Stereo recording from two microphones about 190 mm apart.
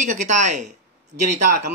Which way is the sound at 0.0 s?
40° right (ahead or behind).